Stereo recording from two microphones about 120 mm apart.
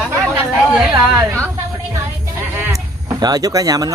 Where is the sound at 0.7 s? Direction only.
15° right (ahead or behind).